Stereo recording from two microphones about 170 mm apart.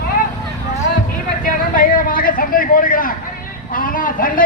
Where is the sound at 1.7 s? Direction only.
55° left (ahead or behind).